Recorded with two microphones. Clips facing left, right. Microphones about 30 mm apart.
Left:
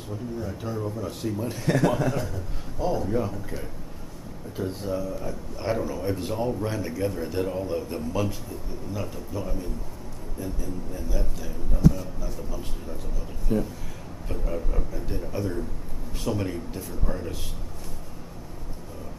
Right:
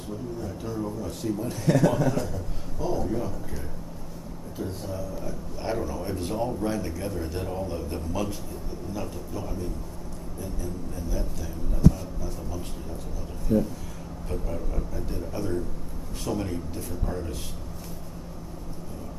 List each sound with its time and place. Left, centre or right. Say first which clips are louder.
0.5 s speech: left 1 dB; centre
5.7 s speech: left 3 dB; centre
13.5 s speech: right 2 dB; left
14.2 s speech: left 2 dB; centre
14.9 s speech: left 1 dB; centre